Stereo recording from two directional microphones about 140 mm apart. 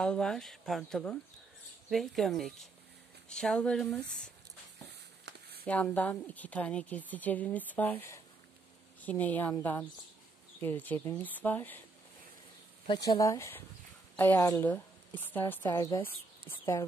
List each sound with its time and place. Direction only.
0.0 s speech: 5° left (ahead or behind)
5.7 s a woman's voice: 10° left (ahead or behind)
12.8 s a woman's voice: 30° left (ahead or behind); by 15.8 s 15° left (ahead or behind)